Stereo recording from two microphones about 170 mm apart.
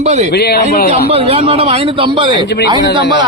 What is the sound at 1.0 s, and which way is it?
A man's voice, 35° right (ahead or behind).